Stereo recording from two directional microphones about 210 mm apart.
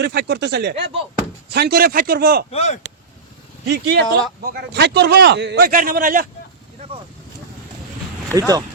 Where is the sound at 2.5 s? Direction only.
30° left (ahead or behind).